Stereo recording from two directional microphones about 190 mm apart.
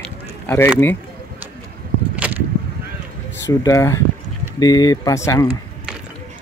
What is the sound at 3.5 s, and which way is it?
A man's voice, 15° left (ahead or behind).